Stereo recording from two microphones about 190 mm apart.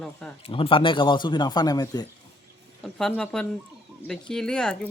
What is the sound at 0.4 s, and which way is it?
A man's voice, 30° left (ahead or behind).